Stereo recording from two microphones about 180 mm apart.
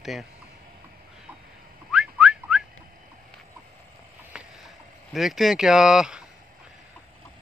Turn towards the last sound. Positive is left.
turn(degrees=-5)  # may be behind; listen again after turning